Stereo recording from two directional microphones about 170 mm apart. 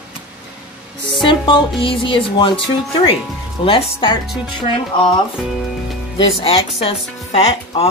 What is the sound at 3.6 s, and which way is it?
Speech, 30° left (ahead or behind).